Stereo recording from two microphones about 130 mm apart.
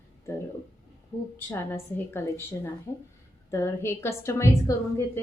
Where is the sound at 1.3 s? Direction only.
20° left (ahead or behind).